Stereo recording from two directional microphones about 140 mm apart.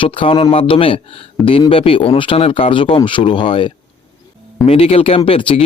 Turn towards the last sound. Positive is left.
turn(degrees=40)  # may be behind; listen again after turning